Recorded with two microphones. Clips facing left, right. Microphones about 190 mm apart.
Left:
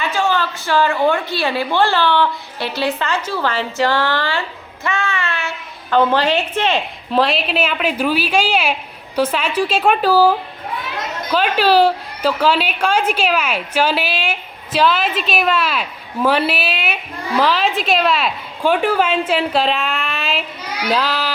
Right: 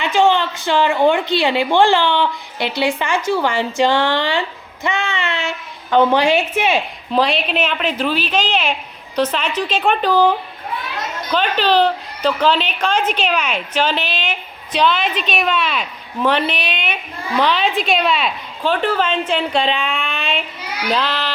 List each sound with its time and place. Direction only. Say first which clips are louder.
0.0 s a woman's voice: right 4 dB; 20° right (ahead or behind)
7.1 s a woman's voice: even; centre (ahead or behind)